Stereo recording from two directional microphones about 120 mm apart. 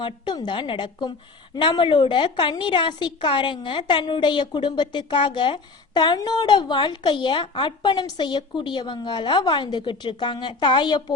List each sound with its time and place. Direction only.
0.0 s a woman's voice: 40° left (ahead or behind)